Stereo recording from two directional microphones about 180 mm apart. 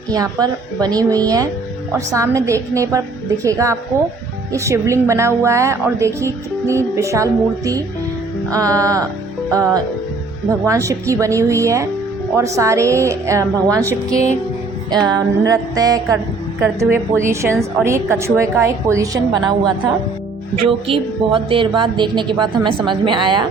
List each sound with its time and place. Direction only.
0.1 s a woman's voice: 20° right (ahead or behind)
10.5 s a woman's voice: 15° right (ahead or behind)
14.8 s a woman's voice: 20° right (ahead or behind)